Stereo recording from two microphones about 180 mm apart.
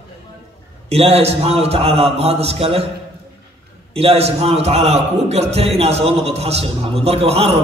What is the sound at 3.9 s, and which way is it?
A man's voice, 35° right (ahead or behind).